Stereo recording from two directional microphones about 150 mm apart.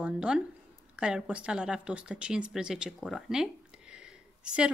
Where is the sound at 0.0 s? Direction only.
5° right (ahead or behind).